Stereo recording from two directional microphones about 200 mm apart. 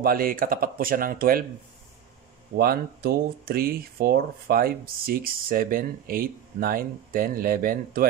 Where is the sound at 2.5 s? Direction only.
50° right (ahead or behind).